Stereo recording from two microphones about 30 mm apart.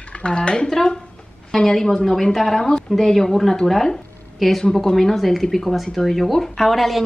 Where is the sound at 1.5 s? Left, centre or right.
Centre.